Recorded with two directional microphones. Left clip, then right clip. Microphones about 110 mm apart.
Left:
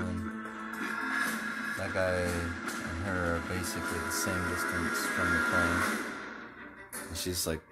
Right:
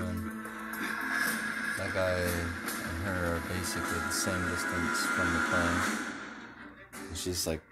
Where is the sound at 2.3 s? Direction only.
45° right (ahead or behind).